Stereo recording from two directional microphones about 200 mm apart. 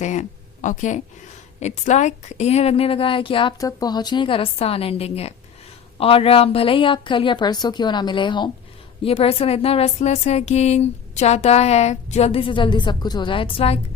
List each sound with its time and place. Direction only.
0.0 s speech: 35° left (ahead or behind)